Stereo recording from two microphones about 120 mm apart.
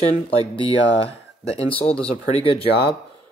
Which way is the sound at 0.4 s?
50° left (ahead or behind).